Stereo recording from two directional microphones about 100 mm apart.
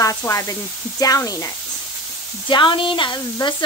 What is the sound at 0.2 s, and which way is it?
Speech, 30° left (ahead or behind).